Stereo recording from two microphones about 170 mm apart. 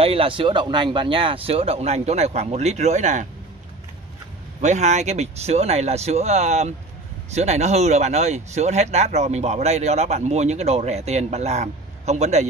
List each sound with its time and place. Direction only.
0.0 s speech: 35° right (ahead or behind)
4.6 s speech: 45° right (ahead or behind)